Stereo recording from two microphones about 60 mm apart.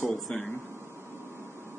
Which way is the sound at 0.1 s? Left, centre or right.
Centre.